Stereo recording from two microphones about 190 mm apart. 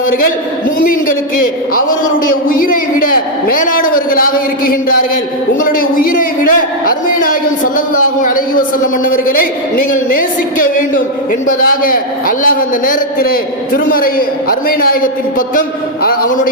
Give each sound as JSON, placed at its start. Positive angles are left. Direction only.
{"t": 2.5, "sound": "a man's voice", "side_deg": 45}
{"t": 11.4, "sound": "a man's voice", "side_deg": 50}